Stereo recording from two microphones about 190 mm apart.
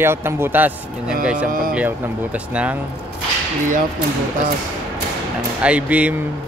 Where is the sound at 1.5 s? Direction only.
50° right (ahead or behind).